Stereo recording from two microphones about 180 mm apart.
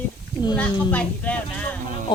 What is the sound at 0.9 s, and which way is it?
Speech, 10° left (ahead or behind).